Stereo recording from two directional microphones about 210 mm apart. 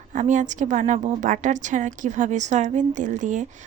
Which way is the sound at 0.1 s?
35° right (ahead or behind).